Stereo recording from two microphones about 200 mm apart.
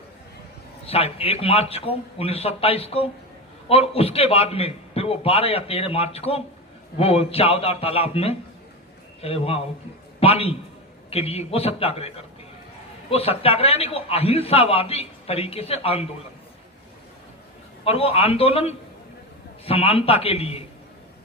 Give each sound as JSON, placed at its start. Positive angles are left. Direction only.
{"t": 0.9, "sound": "a man's voice", "side_deg": 30}
{"t": 17.8, "sound": "a man's voice", "side_deg": 30}